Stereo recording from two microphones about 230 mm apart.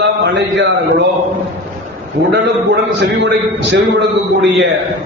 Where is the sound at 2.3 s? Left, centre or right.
Right.